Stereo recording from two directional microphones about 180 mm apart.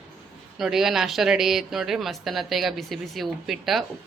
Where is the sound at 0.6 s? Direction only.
Centre (ahead or behind).